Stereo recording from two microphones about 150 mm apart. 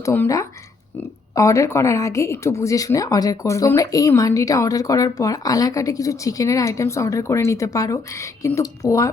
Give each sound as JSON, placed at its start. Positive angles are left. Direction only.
{"t": 0.0, "sound": "speech", "side_deg": 20}